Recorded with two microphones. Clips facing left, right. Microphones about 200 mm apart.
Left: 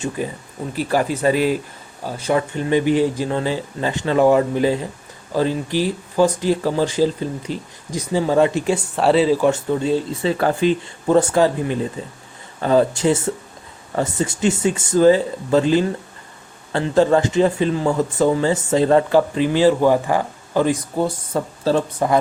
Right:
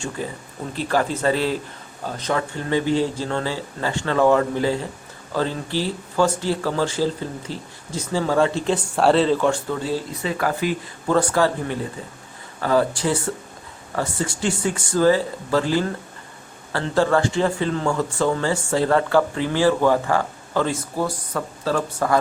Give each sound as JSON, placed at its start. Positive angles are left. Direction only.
{"t": 0.2, "sound": "speech", "side_deg": 15}
{"t": 9.0, "sound": "speech", "side_deg": 5}
{"t": 9.5, "sound": "speech", "side_deg": 20}